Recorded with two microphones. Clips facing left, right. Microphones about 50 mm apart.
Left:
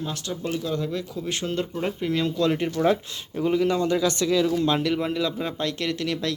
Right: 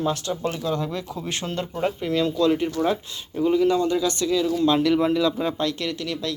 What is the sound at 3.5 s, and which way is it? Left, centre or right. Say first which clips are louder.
Speech: right 2 dB; left.